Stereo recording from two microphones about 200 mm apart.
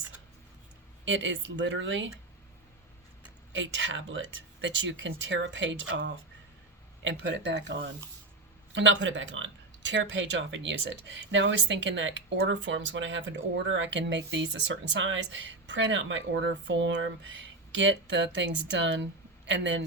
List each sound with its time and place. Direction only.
1.0 s speech: 65° right (ahead or behind)
3.5 s speech: 65° right (ahead or behind)